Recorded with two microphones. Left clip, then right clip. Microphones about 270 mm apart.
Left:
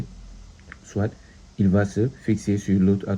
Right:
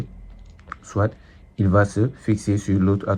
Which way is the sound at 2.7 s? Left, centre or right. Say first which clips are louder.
Right 3 dB; right.